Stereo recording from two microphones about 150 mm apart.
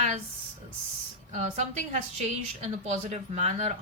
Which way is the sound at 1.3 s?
50° right (ahead or behind).